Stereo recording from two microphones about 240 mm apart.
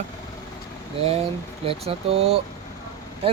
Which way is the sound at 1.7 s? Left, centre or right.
Right.